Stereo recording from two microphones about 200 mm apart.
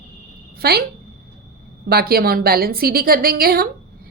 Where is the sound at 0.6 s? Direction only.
50° right (ahead or behind).